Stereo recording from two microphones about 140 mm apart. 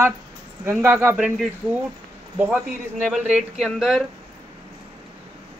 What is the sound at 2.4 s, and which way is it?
Speech, 15° right (ahead or behind).